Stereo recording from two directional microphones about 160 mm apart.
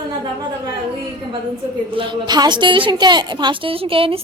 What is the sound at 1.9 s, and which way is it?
A woman's voice, 30° right (ahead or behind).